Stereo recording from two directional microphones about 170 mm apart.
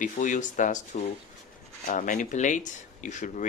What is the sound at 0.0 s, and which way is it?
Speech, 50° left (ahead or behind).